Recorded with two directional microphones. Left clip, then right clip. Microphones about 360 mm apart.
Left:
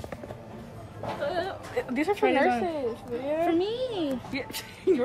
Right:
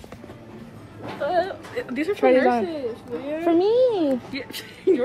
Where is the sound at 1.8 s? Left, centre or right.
Left.